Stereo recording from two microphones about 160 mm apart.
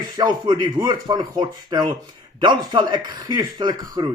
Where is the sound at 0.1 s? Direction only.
25° right (ahead or behind).